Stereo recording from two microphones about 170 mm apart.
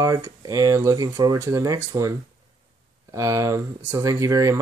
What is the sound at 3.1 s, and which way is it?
Speech, 20° right (ahead or behind).